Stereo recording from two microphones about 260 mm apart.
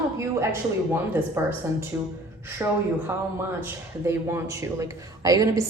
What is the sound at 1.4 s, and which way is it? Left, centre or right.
Speech, centre.